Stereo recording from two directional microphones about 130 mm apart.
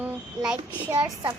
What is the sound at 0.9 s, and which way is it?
Speech, 35° right (ahead or behind).